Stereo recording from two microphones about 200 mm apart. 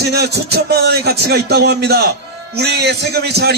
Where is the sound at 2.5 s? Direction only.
55° right (ahead or behind).